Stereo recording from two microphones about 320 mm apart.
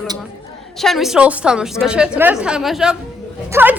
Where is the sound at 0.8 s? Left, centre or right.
Centre.